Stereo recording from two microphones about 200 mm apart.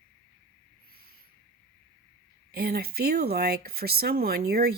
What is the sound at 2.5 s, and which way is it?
Speech, 50° right (ahead or behind).